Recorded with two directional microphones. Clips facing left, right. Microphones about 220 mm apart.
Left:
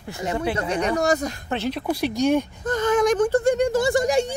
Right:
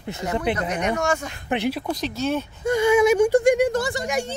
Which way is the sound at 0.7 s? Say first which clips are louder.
Left 2 dB; 35° left (ahead or behind).